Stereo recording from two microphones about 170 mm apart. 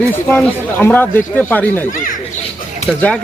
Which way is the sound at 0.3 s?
10° left (ahead or behind).